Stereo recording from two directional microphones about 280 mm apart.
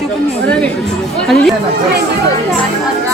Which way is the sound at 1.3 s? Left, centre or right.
Centre.